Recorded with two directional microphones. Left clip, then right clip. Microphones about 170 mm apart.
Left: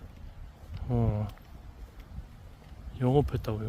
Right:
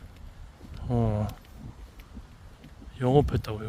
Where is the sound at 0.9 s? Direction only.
20° right (ahead or behind).